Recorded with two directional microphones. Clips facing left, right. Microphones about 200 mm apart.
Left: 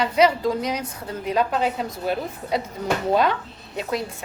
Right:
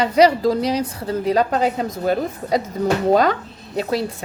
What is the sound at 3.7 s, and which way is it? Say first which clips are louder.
Speech: right 5 dB; 35° right (ahead or behind).